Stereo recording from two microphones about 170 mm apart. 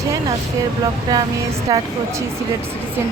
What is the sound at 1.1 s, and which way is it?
Speech, 20° right (ahead or behind).